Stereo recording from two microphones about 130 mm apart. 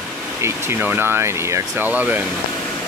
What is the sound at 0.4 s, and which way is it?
Speech, 15° right (ahead or behind).